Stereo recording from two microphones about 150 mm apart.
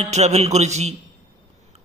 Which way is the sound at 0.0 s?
45° right (ahead or behind).